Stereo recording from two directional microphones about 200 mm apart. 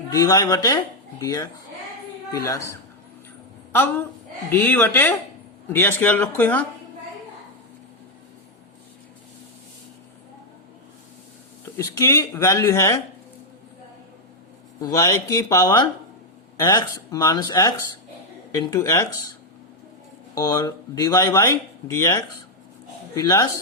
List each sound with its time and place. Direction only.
0.1 s a woman's voice: 20° left (ahead or behind)
11.6 s speech: 15° left (ahead or behind)
14.8 s speech: 15° left (ahead or behind)
20.3 s speech: 15° left (ahead or behind)
23.1 s speech: 15° left (ahead or behind)